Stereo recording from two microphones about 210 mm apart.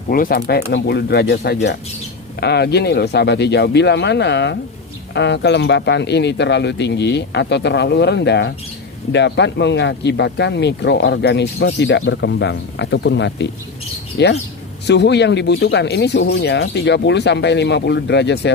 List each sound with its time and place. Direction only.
0.1 s speech: 45° left (ahead or behind)